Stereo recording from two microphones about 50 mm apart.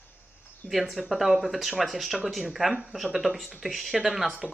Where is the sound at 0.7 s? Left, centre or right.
Centre.